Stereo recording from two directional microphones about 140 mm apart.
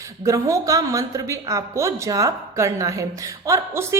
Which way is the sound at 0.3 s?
20° right (ahead or behind).